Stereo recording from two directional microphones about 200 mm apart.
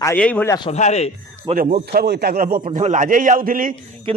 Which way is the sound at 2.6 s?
35° right (ahead or behind).